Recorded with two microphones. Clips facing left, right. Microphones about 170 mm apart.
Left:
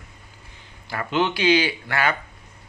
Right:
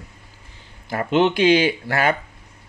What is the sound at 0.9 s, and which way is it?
Speech, 40° right (ahead or behind).